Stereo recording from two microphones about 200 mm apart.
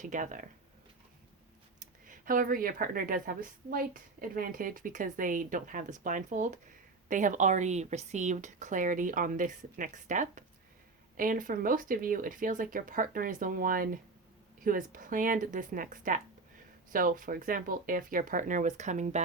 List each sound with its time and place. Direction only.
0.0 s speech: 40° right (ahead or behind)
2.0 s a woman's voice: 45° right (ahead or behind)